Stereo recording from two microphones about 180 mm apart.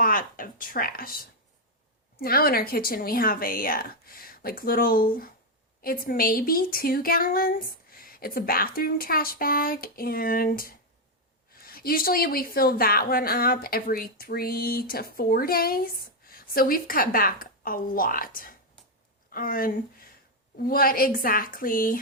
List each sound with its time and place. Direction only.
0.0 s speech: 50° left (ahead or behind)
2.1 s a woman's voice: 55° left (ahead or behind)